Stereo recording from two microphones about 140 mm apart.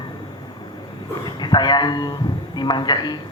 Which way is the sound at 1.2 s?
30° left (ahead or behind).